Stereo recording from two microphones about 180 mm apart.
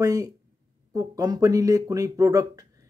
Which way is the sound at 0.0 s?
20° right (ahead or behind).